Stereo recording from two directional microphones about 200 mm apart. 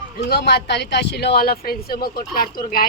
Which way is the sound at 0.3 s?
55° left (ahead or behind).